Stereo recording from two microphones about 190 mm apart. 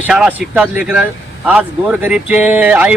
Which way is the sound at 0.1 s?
5° right (ahead or behind).